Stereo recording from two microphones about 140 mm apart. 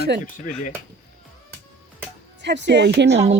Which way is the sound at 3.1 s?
50° right (ahead or behind).